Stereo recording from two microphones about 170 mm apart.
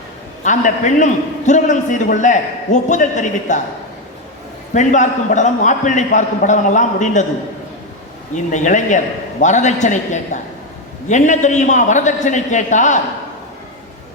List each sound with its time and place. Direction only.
0.4 s a man's voice: 45° left (ahead or behind)
4.7 s a man's voice: 45° left (ahead or behind)
8.5 s a man's voice: 45° left (ahead or behind)